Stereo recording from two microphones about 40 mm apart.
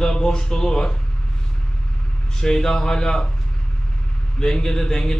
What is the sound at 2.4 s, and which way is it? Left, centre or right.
Speech, centre.